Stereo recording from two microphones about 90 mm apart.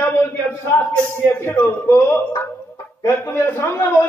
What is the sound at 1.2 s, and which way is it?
Music, 25° left (ahead or behind).